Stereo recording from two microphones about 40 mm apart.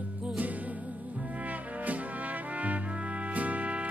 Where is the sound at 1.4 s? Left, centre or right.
Right.